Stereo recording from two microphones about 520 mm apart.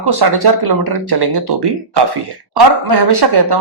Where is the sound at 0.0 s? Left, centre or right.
Right.